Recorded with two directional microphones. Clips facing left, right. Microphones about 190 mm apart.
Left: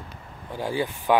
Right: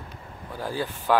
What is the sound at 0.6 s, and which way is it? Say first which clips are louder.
Speech: left 3 dB; 15° left (ahead or behind).